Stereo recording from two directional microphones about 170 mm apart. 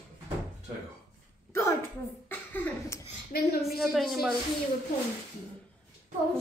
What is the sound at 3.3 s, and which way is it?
Speech, 65° left (ahead or behind).